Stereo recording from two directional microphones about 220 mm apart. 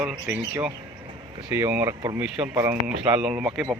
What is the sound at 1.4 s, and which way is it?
Speech, 10° right (ahead or behind).